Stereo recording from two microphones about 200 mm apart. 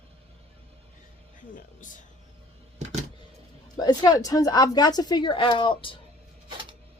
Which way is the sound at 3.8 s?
20° left (ahead or behind).